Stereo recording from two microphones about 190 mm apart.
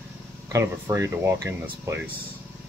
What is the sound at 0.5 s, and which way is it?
Speech, 15° right (ahead or behind).